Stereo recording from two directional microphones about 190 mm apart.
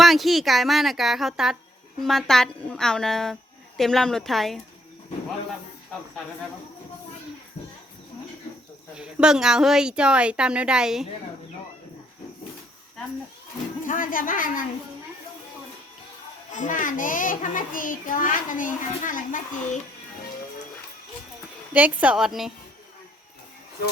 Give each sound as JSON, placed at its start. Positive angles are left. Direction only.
{"t": 0.0, "sound": "a woman's voice", "side_deg": 0}
{"t": 9.0, "sound": "a woman's voice", "side_deg": -5}
{"t": 13.8, "sound": "a child's voice", "side_deg": 45}
{"t": 16.5, "sound": "a child's voice", "side_deg": 40}
{"t": 21.7, "sound": "a woman's voice", "side_deg": -5}